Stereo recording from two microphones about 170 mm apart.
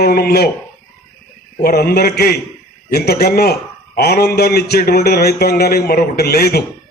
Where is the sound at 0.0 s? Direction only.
65° left (ahead or behind).